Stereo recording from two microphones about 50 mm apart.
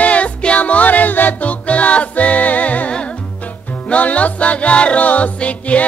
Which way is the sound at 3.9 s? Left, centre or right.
Left.